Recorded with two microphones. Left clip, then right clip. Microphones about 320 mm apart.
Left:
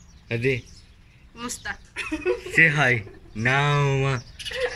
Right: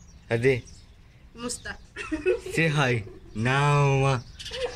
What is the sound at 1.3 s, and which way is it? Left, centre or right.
Speech, centre.